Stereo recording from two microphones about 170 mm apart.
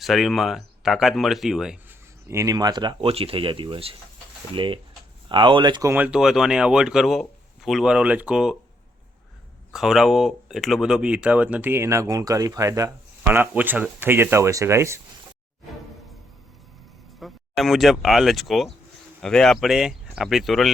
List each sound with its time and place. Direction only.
0.0 s speech: centre (ahead or behind)
2.2 s speech: 15° right (ahead or behind)
5.9 s speech: 10° right (ahead or behind)
9.7 s speech: centre (ahead or behind)
17.2 s speech: centre (ahead or behind)